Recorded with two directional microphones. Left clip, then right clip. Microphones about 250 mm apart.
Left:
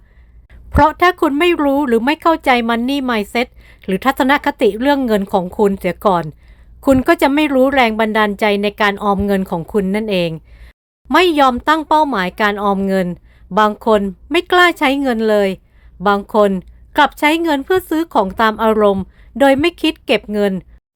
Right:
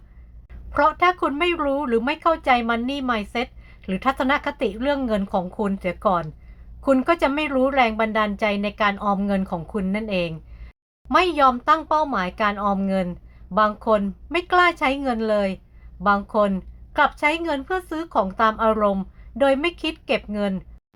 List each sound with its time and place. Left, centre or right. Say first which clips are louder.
0.7 s speech: left 6 dB; left